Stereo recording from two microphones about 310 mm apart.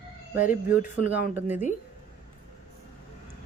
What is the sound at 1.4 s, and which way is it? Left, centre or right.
Speech, centre.